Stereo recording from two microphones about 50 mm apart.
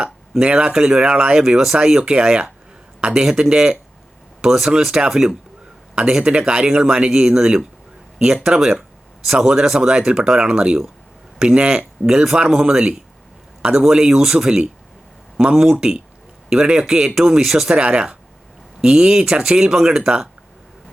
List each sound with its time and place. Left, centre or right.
0.0 s speech: centre
5.9 s speech: centre
15.7 s speech: right; by 17.7 s centre
17.7 s speech: right